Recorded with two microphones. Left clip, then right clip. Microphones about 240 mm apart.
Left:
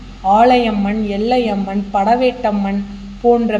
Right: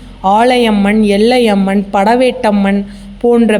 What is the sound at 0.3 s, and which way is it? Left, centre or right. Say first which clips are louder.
Speech: right 2 dB; right.